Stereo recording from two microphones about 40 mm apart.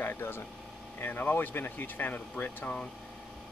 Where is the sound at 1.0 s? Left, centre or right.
Left.